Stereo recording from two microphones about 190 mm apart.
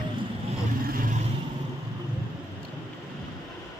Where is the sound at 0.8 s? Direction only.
50° right (ahead or behind).